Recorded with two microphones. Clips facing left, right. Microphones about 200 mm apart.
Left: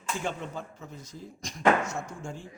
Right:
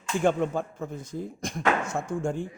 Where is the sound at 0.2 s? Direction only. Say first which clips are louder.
Right 14 dB; 55° right (ahead or behind).